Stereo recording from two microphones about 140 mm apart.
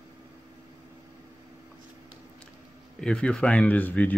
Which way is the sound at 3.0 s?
5° left (ahead or behind).